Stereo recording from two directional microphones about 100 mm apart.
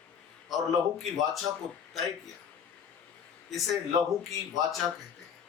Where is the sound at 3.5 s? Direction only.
Centre (ahead or behind).